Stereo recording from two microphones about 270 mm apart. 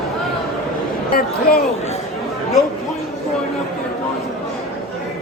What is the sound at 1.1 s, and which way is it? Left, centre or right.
Speech, left.